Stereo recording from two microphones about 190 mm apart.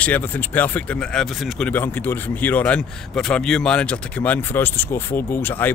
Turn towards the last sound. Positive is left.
turn(degrees=10)  # may be behind; listen again after turning